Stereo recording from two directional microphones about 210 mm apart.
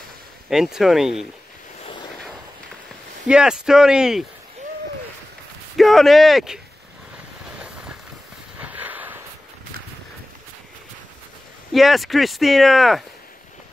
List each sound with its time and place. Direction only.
0.5 s speech: centre (ahead or behind)
1.8 s vehicle: 25° left (ahead or behind)
3.3 s speech: 5° right (ahead or behind)
5.8 s speech: centre (ahead or behind)
7.5 s vehicle: 5° right (ahead or behind)
8.5 s a sound: 5° right (ahead or behind)
11.7 s speech: centre (ahead or behind)